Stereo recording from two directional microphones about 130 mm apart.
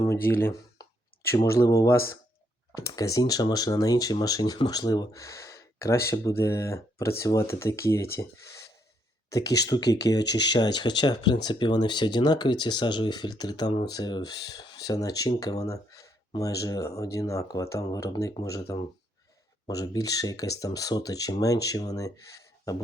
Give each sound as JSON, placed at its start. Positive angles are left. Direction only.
{"t": 0.0, "sound": "speech", "side_deg": 20}
{"t": 9.3, "sound": "speech", "side_deg": 30}